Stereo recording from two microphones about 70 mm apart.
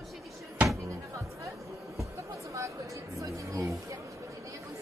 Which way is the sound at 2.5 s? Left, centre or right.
Right.